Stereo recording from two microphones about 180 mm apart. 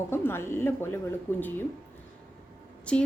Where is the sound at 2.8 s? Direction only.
5° left (ahead or behind).